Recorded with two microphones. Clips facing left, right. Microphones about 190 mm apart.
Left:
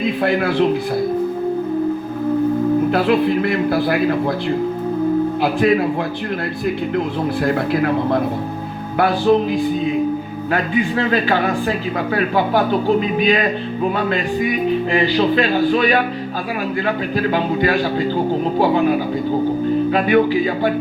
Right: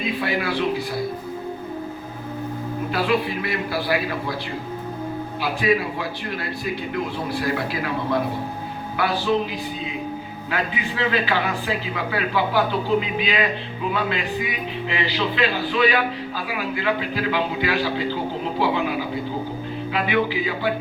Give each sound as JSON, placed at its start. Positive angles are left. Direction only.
{"t": 0.0, "sound": "speech", "side_deg": 50}
{"t": 2.9, "sound": "speech", "side_deg": 55}
{"t": 5.4, "sound": "speech", "side_deg": 55}
{"t": 7.4, "sound": "speech", "side_deg": 50}